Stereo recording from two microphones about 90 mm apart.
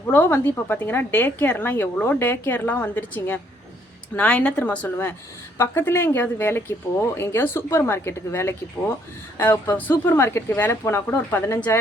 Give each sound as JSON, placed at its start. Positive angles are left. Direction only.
{"t": 0.1, "sound": "a woman's voice", "side_deg": 25}
{"t": 9.7, "sound": "a woman's voice", "side_deg": 20}